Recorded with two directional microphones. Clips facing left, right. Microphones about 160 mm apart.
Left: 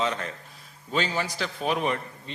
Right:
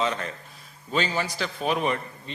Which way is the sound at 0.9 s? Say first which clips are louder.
Right 1 dB; 10° right (ahead or behind).